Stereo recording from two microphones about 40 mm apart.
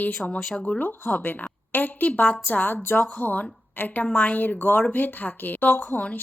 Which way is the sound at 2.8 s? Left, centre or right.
Left.